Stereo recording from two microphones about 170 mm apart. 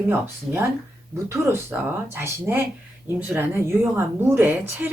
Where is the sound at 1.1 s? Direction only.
15° right (ahead or behind).